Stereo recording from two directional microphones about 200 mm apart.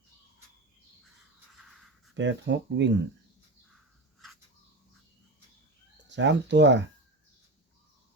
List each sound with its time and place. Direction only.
1.6 s a sound: 5° right (ahead or behind)
2.1 s speech: 60° right (ahead or behind)
6.1 s speech: 60° right (ahead or behind)